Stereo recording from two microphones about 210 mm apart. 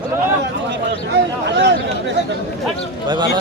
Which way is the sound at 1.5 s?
55° right (ahead or behind).